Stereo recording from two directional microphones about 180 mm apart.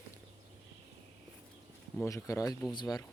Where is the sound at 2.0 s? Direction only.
15° left (ahead or behind).